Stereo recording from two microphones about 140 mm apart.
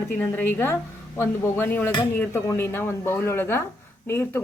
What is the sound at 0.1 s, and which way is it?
Speech, 10° left (ahead or behind).